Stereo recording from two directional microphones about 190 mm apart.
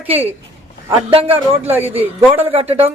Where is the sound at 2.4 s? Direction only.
30° right (ahead or behind).